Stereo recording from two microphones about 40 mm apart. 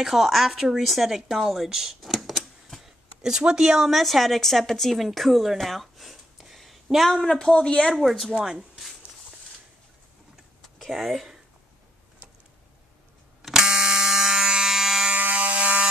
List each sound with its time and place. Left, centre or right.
0.0 s speech: centre
2.1 s a sound: centre
2.8 s a sound: centre
3.9 s speech: centre
6.3 s a sound: centre
7.1 s speech: centre
7.9 s speech: centre
8.4 s speech: right
10.9 s speech: centre
13.4 s fire alarm: centre
15.1 s fire alarm: right